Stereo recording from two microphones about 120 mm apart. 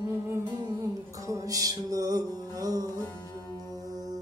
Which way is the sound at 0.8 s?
25° right (ahead or behind).